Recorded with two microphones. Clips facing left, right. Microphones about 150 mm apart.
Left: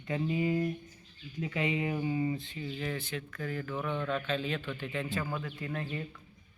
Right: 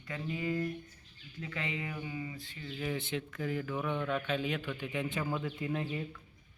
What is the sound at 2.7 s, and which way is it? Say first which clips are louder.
Speech: left 1 dB; centre (ahead or behind).